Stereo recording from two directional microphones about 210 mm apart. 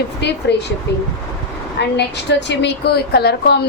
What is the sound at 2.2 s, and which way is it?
Speech, 55° left (ahead or behind).